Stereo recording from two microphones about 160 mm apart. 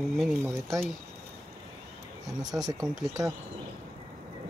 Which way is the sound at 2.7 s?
20° right (ahead or behind).